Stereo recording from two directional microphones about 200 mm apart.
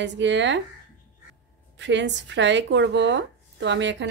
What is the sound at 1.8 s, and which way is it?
Speech, 65° right (ahead or behind).